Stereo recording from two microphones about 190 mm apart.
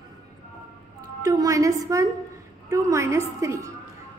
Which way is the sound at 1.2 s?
20° right (ahead or behind).